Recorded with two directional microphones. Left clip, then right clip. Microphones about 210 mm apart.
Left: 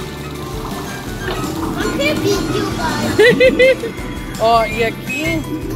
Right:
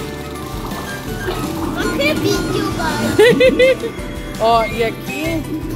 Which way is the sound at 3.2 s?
20° right (ahead or behind).